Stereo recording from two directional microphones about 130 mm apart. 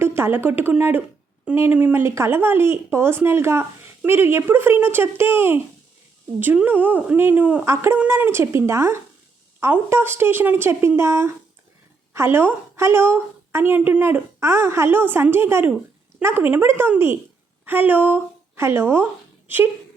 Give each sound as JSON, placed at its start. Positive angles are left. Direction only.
{"t": 0.0, "sound": "a woman's voice", "side_deg": -20}